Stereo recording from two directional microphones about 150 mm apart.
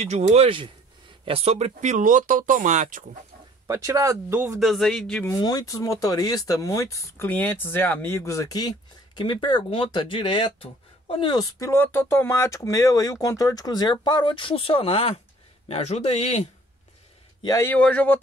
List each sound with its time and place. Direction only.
0.0 s speech: 45° right (ahead or behind)
3.6 s speech: 20° right (ahead or behind)
4.6 s a man's voice: centre (ahead or behind)
5.3 s a man's voice: 25° left (ahead or behind); by 16.4 s 45° left (ahead or behind)
17.4 s a man's voice: 25° left (ahead or behind)
17.6 s speech: 10° left (ahead or behind)